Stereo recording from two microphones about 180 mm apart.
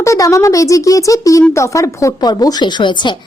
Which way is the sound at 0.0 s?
15° left (ahead or behind).